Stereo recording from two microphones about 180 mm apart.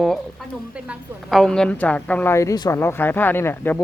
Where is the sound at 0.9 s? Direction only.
Centre (ahead or behind).